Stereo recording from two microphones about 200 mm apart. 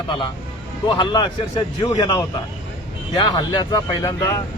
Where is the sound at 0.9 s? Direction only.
25° left (ahead or behind).